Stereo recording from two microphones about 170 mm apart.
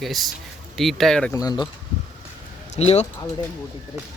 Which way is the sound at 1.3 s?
20° left (ahead or behind).